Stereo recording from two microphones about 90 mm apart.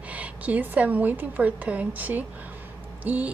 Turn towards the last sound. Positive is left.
turn(degrees=-20)  # may be behind; listen again after turning